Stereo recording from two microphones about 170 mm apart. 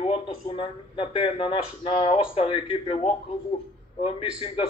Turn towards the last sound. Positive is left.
turn(degrees=35)  # may be behind; listen again after turning